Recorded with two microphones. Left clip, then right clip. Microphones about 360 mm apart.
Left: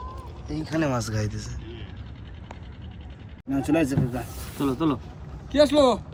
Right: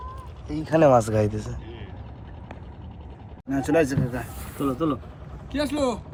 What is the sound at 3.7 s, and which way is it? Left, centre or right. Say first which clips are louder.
Speech: right 3 dB; centre.